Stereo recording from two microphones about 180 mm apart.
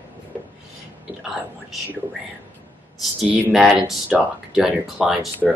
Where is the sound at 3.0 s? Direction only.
Centre (ahead or behind).